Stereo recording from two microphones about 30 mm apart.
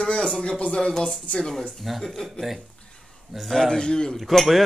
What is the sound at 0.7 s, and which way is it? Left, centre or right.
Speech, left.